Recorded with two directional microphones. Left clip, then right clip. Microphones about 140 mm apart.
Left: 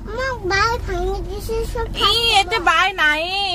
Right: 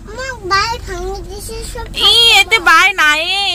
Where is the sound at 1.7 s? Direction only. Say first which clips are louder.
Right 8 dB; 5° right (ahead or behind).